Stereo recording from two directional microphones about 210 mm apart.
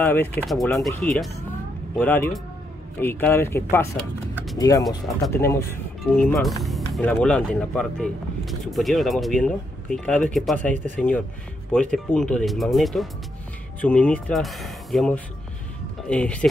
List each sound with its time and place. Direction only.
0.0 s speech: 10° left (ahead or behind)